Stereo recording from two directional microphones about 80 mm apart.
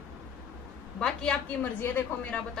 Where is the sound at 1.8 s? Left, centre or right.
Left.